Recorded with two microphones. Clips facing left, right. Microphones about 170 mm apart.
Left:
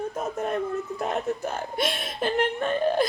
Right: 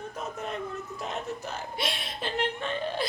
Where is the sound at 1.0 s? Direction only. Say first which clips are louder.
Left 6 dB; 50° left (ahead or behind).